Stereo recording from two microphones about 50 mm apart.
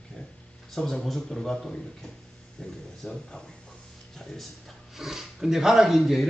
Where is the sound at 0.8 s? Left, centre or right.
Centre; by 3.2 s left.